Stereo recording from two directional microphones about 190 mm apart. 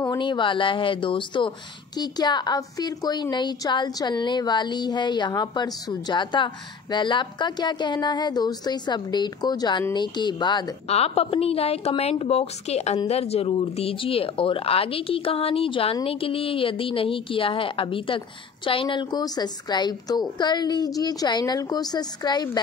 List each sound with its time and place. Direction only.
0.2 s a woman's voice: 25° left (ahead or behind)